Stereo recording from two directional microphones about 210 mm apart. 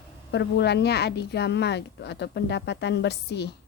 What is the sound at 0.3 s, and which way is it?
A woman's voice, 55° left (ahead or behind).